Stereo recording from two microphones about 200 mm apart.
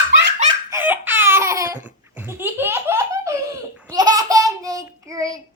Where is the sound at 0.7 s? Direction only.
10° right (ahead or behind).